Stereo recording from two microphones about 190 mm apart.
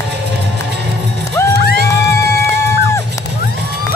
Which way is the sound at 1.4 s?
15° left (ahead or behind).